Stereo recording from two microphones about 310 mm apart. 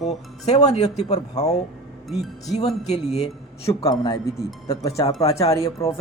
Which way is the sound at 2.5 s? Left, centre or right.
Left.